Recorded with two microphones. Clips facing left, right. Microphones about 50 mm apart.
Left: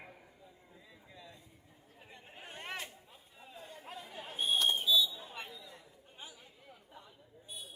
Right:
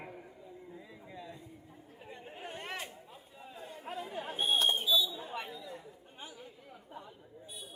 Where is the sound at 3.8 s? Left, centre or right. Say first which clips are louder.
Right 9 dB; right.